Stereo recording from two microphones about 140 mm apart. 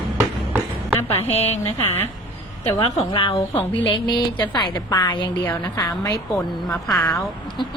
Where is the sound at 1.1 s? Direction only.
50° left (ahead or behind).